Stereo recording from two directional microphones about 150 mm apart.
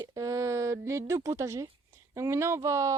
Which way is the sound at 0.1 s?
20° right (ahead or behind).